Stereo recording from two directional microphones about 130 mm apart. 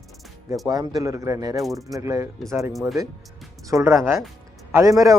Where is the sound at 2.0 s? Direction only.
25° right (ahead or behind).